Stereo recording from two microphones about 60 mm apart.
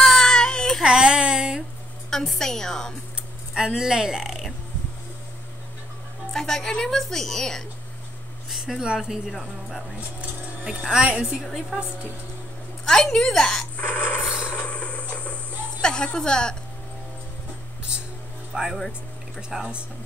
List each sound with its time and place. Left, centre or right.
0.0 s baby cry: centre
0.8 s a sound: centre
2.0 s a woman's voice: centre
3.5 s speech: centre
6.3 s a woman's voice: centre
8.5 s a sound: centre
8.8 s speech: centre
10.6 s a woman's voice: centre
11.4 s speech: centre
12.8 s a woman's voice: centre
13.7 s a sound: left
14.5 s a sound: left
15.8 s a woman's voice: centre
18.5 s speech: centre